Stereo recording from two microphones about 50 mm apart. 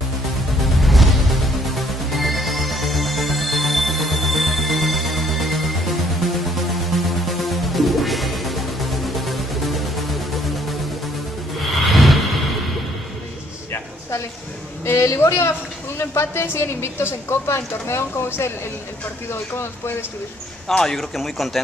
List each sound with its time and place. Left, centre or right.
0.6 s music: centre
11.9 s music: centre
14.9 s a woman's voice: left
19.6 s speech: left
20.6 s speech: centre